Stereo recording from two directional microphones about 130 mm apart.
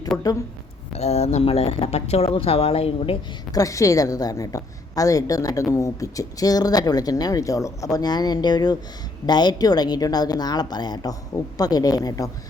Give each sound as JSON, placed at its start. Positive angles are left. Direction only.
{"t": 0.1, "sound": "a woman's voice", "side_deg": 25}
{"t": 0.9, "sound": "speech", "side_deg": 55}
{"t": 3.5, "sound": "a woman's voice", "side_deg": 25}